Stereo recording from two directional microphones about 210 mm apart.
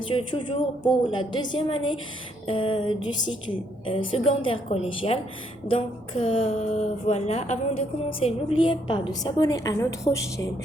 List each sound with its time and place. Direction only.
0.1 s a woman's voice: 25° left (ahead or behind)